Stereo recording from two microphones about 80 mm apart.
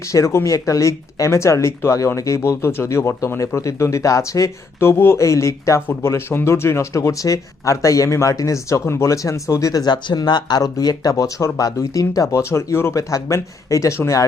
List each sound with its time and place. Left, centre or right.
0.1 s speech: left
9.8 s speech: left
10.6 s speech: left